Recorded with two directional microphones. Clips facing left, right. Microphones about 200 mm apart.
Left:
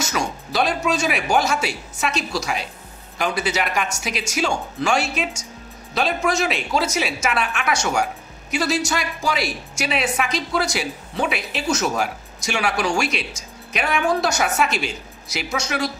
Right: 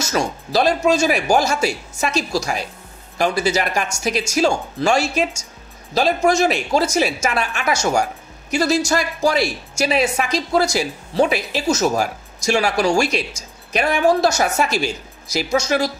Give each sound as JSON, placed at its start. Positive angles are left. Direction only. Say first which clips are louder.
{"t": 0.1, "sound": "speech", "louder": "right 5 dB", "side_deg": -35}